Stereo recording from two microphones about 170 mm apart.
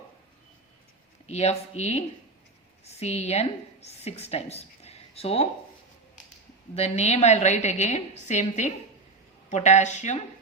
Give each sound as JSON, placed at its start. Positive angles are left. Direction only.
{"t": 1.3, "sound": "a woman's voice", "side_deg": 40}
{"t": 6.7, "sound": "a woman's voice", "side_deg": 40}